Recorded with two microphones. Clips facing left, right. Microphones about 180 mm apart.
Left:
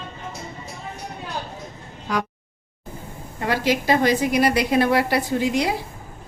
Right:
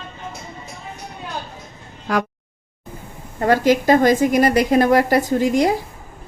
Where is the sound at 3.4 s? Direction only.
45° right (ahead or behind).